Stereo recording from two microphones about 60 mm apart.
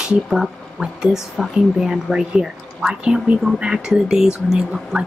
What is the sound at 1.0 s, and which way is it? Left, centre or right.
Speech, centre.